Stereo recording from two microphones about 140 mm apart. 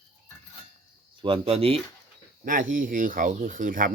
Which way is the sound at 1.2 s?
40° right (ahead or behind).